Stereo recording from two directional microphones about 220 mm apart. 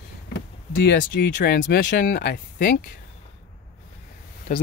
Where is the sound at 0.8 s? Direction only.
45° left (ahead or behind).